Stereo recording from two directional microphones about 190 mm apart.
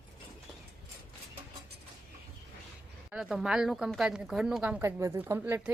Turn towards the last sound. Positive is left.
turn(degrees=-10)  # may be behind; listen again after turning